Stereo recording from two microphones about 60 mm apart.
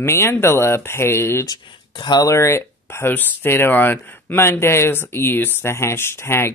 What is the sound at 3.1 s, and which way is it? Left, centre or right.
Speech, left.